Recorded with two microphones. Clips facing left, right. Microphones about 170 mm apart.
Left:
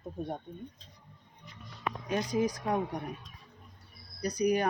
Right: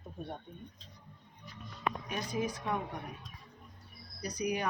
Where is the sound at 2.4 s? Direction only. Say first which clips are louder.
Left 5 dB; 40° left (ahead or behind).